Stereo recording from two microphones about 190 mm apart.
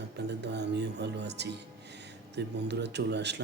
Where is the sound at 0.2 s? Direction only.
65° right (ahead or behind).